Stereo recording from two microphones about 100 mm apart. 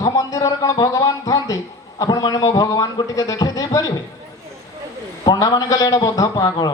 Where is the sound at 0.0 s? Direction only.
40° left (ahead or behind).